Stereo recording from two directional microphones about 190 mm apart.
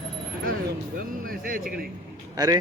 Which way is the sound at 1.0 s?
50° right (ahead or behind).